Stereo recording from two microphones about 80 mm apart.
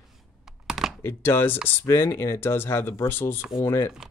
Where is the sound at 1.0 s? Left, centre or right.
Left.